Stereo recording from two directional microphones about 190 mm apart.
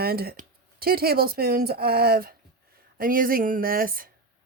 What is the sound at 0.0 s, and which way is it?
Speech, 55° right (ahead or behind).